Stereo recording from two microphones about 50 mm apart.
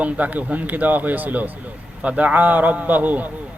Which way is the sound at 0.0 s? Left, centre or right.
Right.